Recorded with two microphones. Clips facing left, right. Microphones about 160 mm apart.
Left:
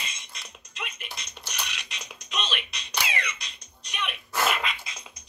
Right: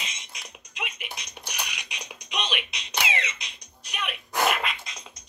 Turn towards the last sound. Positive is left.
turn(degrees=5)  # may be behind; listen again after turning